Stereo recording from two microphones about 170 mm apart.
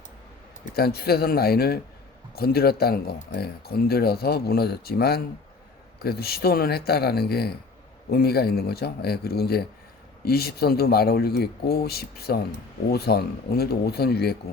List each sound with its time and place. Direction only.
0.7 s speech: 65° left (ahead or behind)